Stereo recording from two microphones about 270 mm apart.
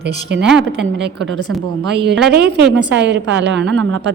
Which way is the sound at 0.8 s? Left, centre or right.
Right.